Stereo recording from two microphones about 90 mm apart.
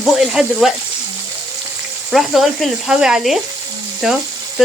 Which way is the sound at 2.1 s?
5° right (ahead or behind).